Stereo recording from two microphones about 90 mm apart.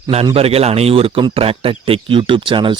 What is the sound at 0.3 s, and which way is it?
Speech, 90° right.